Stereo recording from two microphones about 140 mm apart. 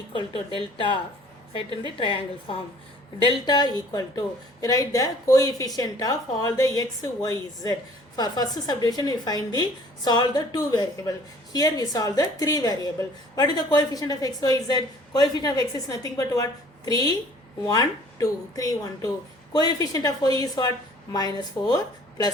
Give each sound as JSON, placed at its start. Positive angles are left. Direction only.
{"t": 0.1, "sound": "speech", "side_deg": 35}
{"t": 2.0, "sound": "a woman's voice", "side_deg": 35}